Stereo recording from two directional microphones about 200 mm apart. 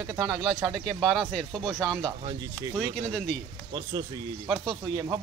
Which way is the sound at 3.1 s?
5° left (ahead or behind).